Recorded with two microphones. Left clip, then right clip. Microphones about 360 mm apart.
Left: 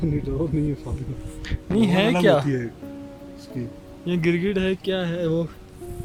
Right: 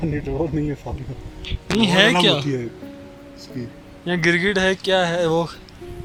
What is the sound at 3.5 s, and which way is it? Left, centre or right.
Speech, centre.